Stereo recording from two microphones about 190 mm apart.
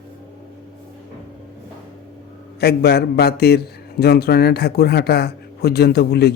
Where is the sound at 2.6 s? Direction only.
60° left (ahead or behind).